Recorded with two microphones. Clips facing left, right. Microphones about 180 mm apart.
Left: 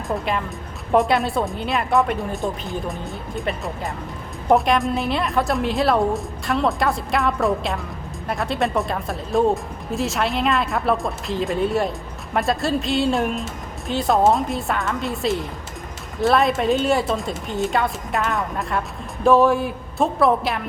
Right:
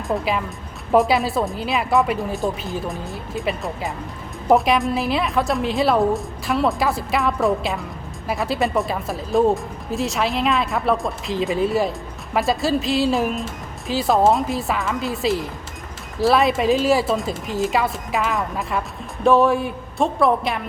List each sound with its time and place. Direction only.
0.1 s speech: 5° right (ahead or behind)